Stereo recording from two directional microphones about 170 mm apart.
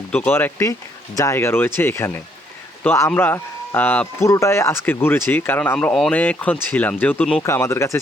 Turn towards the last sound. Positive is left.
turn(degrees=15)  # may be behind; listen again after turning